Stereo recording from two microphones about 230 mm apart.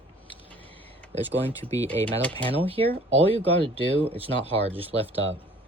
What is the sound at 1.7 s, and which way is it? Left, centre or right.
Speech, centre.